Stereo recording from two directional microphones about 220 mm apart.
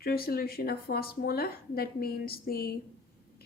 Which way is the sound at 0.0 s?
45° left (ahead or behind).